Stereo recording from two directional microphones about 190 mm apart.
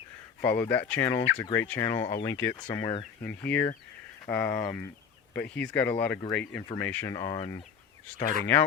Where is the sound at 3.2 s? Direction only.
10° left (ahead or behind).